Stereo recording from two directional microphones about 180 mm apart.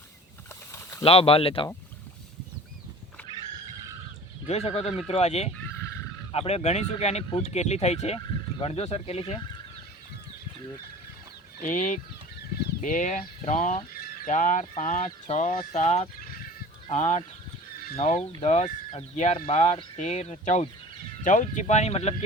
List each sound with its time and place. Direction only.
0.7 s a sound: 15° left (ahead or behind)
1.0 s speech: 30° left (ahead or behind)
4.4 s speech: 35° left (ahead or behind)
11.6 s speech: 45° left (ahead or behind)
16.9 s speech: 40° left (ahead or behind)